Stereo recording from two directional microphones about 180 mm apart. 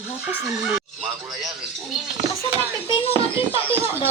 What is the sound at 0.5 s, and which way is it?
Fowl, 5° right (ahead or behind).